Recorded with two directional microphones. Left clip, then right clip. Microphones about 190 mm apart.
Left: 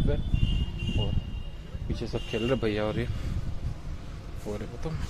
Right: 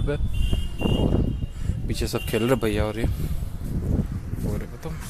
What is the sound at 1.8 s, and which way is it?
Speech, 40° right (ahead or behind).